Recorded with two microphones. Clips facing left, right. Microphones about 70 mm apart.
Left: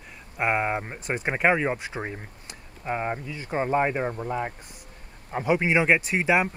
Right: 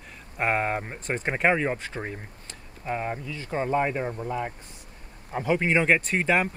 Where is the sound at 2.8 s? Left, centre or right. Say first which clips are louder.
Left 1 dB; centre.